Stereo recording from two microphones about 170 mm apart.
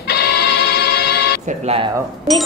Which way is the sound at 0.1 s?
75° left (ahead or behind).